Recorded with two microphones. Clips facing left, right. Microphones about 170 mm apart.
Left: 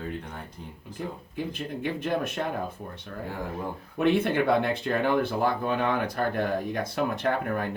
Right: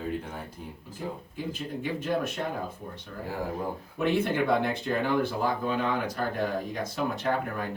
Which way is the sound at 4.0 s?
60° left (ahead or behind).